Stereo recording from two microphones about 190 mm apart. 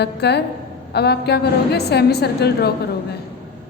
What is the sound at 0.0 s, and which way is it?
A woman's voice, 60° left (ahead or behind).